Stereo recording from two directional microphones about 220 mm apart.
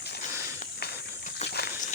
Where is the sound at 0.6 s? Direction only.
45° left (ahead or behind).